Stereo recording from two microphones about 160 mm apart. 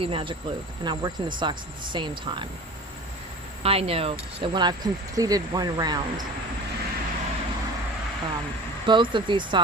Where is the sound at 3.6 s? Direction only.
35° right (ahead or behind).